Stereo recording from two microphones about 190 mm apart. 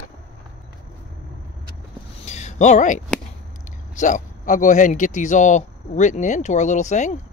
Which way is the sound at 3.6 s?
40° left (ahead or behind).